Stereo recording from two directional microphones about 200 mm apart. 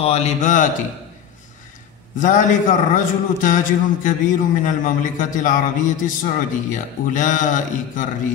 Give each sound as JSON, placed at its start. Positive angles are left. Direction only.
{"t": 0.0, "sound": "a man's voice", "side_deg": 30}
{"t": 2.1, "sound": "a man's voice", "side_deg": 40}